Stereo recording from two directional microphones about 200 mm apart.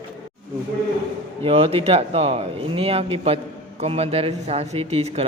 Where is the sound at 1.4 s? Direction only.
30° right (ahead or behind).